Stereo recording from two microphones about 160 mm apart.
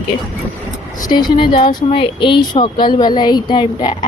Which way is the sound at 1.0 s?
25° left (ahead or behind).